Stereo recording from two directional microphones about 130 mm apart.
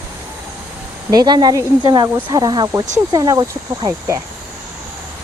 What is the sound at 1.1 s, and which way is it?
Speech, 30° right (ahead or behind).